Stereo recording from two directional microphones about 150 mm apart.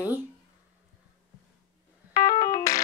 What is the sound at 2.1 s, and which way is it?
Keyboard, 20° left (ahead or behind).